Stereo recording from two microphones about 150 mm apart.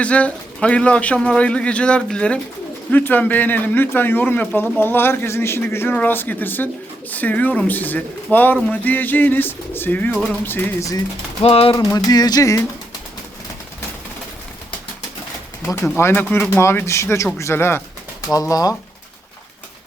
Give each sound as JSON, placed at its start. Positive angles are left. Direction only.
{"t": 0.0, "sound": "speech", "side_deg": 10}
{"t": 11.4, "sound": "a sound", "side_deg": 40}
{"t": 11.7, "sound": "speech", "side_deg": 25}
{"t": 16.0, "sound": "speech", "side_deg": 15}